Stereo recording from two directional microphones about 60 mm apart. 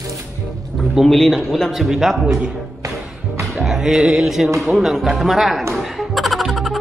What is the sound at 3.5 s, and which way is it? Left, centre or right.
Speech, centre.